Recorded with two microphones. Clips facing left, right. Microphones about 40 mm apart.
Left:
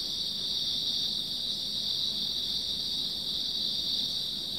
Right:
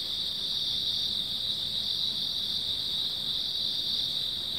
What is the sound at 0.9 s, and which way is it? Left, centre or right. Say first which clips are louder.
Cricket: right 2 dB; right.